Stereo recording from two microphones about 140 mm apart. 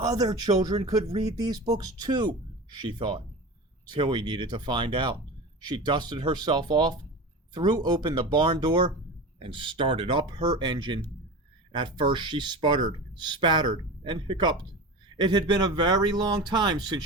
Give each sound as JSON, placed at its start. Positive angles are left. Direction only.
{"t": 0.0, "sound": "speech", "side_deg": -25}